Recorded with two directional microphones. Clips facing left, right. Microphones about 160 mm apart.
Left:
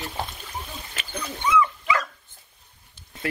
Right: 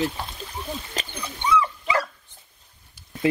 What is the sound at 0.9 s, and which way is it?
Dog, 35° right (ahead or behind).